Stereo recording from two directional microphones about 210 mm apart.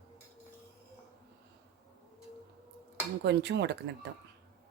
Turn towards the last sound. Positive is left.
turn(degrees=-55)  # may be behind; listen again after turning